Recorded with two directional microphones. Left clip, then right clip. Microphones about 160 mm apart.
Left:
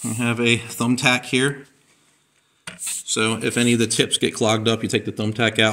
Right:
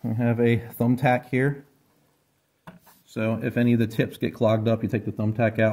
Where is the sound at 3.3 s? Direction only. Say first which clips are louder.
Left 4 dB; 50° right (ahead or behind).